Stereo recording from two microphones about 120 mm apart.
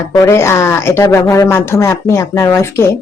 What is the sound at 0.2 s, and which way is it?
Speech, 25° left (ahead or behind).